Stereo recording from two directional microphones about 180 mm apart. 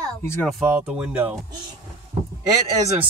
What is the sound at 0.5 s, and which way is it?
Speech, 5° right (ahead or behind).